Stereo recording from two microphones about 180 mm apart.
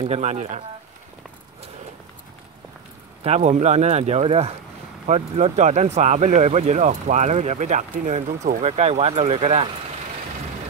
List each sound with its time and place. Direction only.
0.0 s speech: 40° right (ahead or behind)
3.3 s speech: 40° right (ahead or behind)